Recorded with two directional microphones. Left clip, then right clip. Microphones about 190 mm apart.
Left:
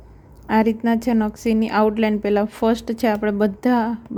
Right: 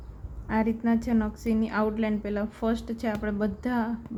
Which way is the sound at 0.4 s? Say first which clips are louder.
Left 9 dB; 50° left (ahead or behind).